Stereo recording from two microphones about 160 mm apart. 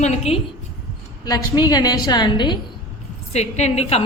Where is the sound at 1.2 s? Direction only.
25° left (ahead or behind).